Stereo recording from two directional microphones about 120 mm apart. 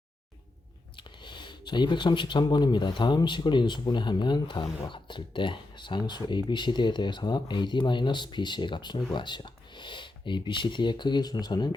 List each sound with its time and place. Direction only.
0.9 s speech: 40° left (ahead or behind)